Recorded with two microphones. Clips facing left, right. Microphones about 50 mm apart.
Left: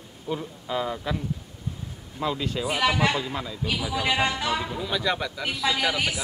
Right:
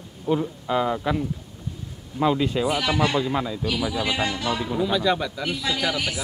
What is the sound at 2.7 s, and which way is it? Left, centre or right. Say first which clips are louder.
Speech: right 1 dB; centre.